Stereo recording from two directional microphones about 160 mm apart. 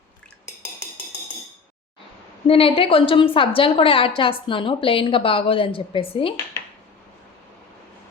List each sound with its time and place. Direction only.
2.5 s a woman's voice: 35° left (ahead or behind)